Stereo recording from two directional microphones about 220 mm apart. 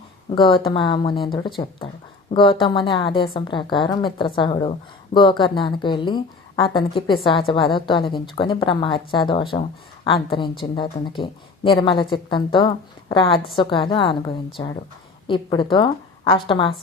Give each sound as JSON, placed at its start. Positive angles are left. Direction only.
{"t": 0.3, "sound": "a woman's voice", "side_deg": 25}